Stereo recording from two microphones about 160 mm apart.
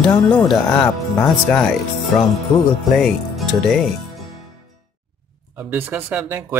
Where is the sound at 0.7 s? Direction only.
20° left (ahead or behind).